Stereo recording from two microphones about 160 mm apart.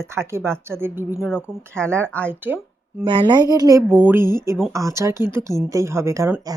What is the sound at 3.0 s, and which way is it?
Speech, 30° right (ahead or behind).